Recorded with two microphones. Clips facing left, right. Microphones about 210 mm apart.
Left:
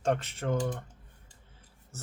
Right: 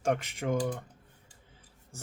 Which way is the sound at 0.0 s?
10° right (ahead or behind).